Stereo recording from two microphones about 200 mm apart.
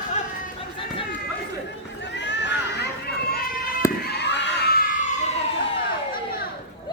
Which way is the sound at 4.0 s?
55° left (ahead or behind).